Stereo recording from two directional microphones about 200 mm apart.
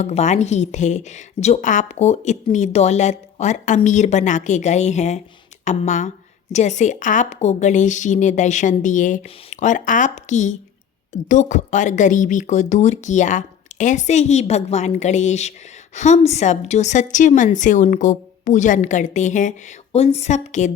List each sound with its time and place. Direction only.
0.0 s a woman's voice: 35° left (ahead or behind)